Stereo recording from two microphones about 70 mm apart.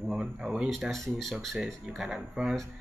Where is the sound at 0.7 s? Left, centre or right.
Centre.